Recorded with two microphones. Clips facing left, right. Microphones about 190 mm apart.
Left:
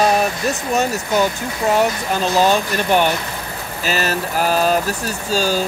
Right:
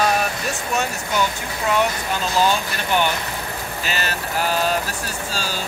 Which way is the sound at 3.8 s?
40° left (ahead or behind).